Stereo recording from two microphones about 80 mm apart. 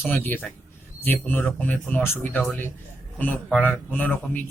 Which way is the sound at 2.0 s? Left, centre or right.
Left.